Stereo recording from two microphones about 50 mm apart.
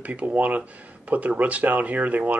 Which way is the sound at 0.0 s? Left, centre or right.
Right.